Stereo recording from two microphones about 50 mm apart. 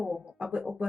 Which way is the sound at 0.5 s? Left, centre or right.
Right.